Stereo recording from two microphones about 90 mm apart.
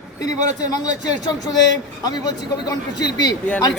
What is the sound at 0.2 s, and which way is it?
A man's voice, 45° left (ahead or behind).